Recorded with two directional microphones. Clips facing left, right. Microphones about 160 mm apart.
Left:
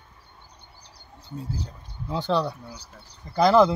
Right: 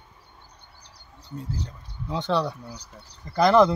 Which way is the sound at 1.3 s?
5° left (ahead or behind).